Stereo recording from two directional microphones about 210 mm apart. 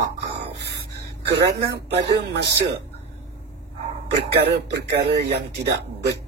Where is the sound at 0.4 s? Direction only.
50° right (ahead or behind).